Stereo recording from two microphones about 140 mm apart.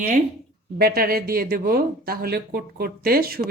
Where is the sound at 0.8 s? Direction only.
90° right.